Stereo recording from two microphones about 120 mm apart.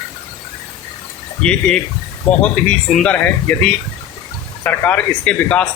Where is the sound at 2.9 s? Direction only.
10° left (ahead or behind).